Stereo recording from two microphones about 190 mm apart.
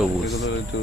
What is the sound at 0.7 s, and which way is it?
Speech, 65° left (ahead or behind).